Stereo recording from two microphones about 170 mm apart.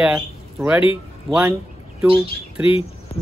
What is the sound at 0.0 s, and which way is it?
Speech, 5° right (ahead or behind).